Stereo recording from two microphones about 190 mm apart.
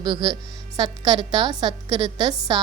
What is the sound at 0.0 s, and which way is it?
A woman's voice, 20° right (ahead or behind).